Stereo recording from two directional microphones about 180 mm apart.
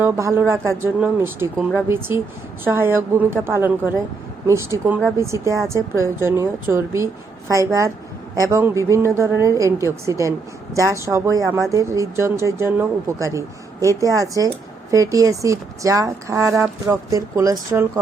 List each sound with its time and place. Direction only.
0.0 s speech: 15° right (ahead or behind)